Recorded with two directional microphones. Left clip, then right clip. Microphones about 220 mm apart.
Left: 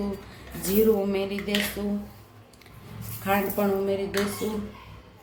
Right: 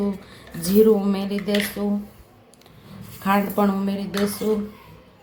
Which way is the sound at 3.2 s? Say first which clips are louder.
Right 4 dB; 35° right (ahead or behind).